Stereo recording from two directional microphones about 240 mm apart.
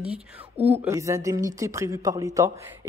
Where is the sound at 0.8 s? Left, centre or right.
Centre.